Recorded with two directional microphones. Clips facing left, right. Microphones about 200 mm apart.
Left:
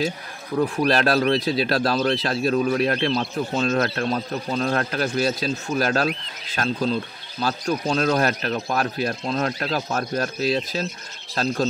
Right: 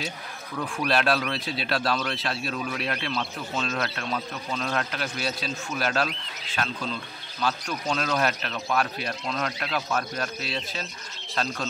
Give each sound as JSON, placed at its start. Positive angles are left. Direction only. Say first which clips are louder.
{"t": 0.7, "sound": "speech", "louder": "left 3 dB", "side_deg": 40}